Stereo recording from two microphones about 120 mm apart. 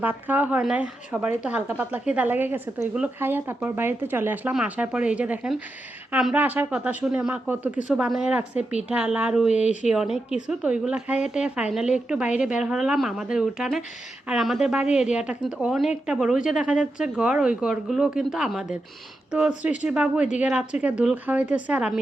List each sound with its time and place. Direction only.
0.0 s a woman's voice: 15° right (ahead or behind)